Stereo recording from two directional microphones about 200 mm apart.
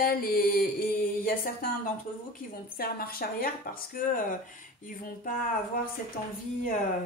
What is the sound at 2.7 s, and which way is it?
Speech, 50° left (ahead or behind).